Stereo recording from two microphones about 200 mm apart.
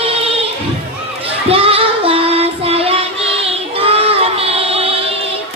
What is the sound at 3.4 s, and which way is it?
Child singing, 30° right (ahead or behind).